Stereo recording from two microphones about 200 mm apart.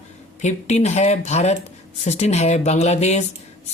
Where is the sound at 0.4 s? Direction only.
35° left (ahead or behind).